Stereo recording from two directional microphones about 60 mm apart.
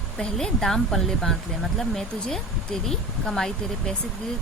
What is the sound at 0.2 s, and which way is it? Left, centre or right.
Speech, centre.